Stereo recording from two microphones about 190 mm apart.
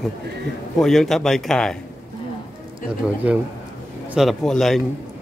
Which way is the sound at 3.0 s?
5° right (ahead or behind).